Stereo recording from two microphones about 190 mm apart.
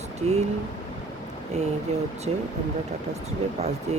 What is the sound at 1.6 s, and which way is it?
Speech, 35° right (ahead or behind).